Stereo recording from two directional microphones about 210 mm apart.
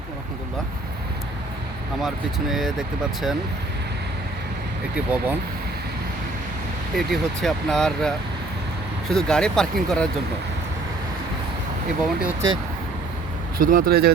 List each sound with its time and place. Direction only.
2.0 s speech: centre (ahead or behind)
4.9 s speech: 5° right (ahead or behind)
6.9 s speech: centre (ahead or behind)
12.2 s speech: 10° right (ahead or behind)
13.6 s speech: 40° right (ahead or behind)